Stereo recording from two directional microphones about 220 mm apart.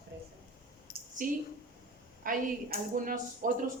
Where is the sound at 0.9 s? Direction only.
45° left (ahead or behind).